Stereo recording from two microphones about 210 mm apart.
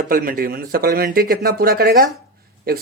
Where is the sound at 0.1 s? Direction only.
45° right (ahead or behind).